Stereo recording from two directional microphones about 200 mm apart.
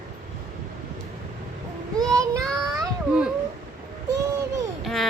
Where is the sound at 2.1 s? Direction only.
15° right (ahead or behind).